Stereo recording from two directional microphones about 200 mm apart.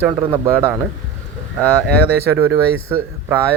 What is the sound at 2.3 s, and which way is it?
Speech, 10° right (ahead or behind).